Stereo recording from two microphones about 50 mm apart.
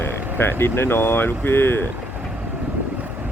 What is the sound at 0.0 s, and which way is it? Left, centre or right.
Speech, left.